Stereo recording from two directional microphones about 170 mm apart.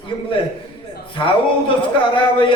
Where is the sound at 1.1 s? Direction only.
30° left (ahead or behind).